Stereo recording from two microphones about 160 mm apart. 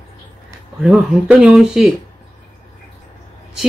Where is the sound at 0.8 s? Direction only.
5° right (ahead or behind).